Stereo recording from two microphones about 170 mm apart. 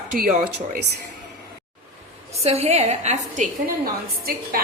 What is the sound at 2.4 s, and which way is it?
A woman's voice, 35° right (ahead or behind).